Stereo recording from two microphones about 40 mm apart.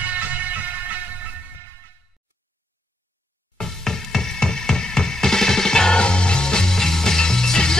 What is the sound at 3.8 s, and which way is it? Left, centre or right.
Music, centre.